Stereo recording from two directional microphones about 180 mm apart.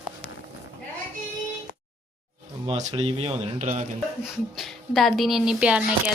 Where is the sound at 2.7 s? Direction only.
35° right (ahead or behind).